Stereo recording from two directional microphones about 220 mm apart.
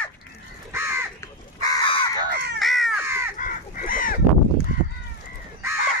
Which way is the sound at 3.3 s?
40° left (ahead or behind).